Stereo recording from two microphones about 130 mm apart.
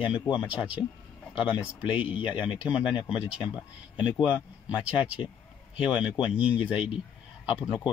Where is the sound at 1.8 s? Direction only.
10° right (ahead or behind).